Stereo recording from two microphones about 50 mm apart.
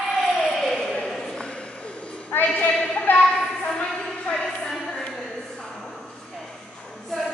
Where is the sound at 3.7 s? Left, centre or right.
Centre.